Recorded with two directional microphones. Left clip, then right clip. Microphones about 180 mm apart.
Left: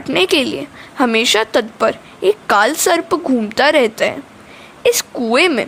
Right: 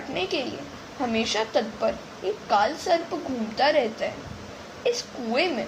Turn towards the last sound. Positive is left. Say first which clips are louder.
# left 12 dB
turn(degrees=55)  # may be behind; listen again after turning